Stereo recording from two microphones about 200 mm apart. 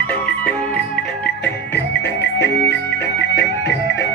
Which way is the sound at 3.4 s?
60° left (ahead or behind).